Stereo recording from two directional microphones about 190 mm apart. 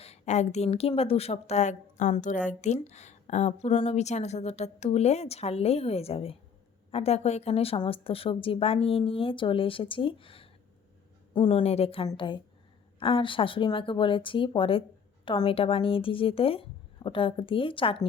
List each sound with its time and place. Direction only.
0.0 s a woman's voice: 35° left (ahead or behind)